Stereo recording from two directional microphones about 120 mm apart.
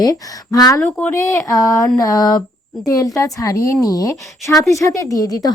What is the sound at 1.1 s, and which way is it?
A woman's voice, 30° left (ahead or behind).